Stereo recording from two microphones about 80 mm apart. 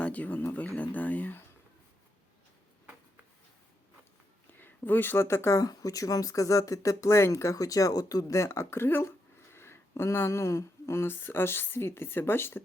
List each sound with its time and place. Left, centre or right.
0.0 s speech: centre
4.5 s speech: left